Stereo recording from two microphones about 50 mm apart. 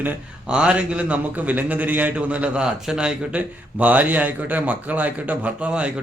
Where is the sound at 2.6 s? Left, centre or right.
Centre.